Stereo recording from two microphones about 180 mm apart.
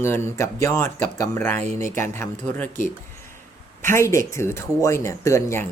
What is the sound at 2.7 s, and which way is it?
Speech, 45° left (ahead or behind).